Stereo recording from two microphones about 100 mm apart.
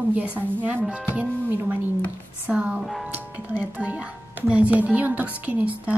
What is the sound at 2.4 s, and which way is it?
Speech, 10° right (ahead or behind).